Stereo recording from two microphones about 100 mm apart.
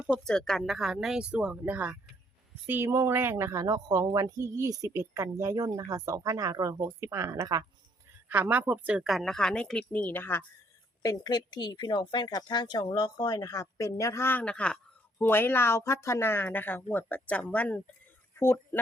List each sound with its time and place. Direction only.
0.3 s a woman's voice: 5° left (ahead or behind); by 7.6 s 35° right (ahead or behind)
8.3 s speech: 15° right (ahead or behind); by 10.4 s 20° left (ahead or behind)
11.0 s speech: 40° left (ahead or behind); by 14.4 s 25° left (ahead or behind)
14.4 s speech: 10° left (ahead or behind)
15.2 s speech: 20° left (ahead or behind)